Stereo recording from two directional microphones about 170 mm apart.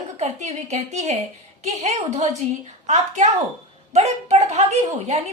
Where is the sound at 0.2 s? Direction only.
40° right (ahead or behind).